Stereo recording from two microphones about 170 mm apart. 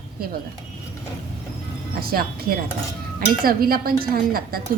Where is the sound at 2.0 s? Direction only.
65° right (ahead or behind).